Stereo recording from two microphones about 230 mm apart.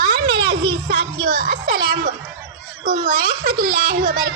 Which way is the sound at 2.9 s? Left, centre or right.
Right.